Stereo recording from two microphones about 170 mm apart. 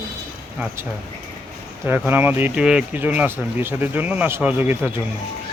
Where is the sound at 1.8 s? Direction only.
10° right (ahead or behind).